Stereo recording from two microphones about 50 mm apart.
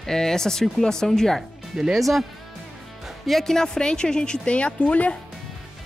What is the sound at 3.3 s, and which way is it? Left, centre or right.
Speech, centre.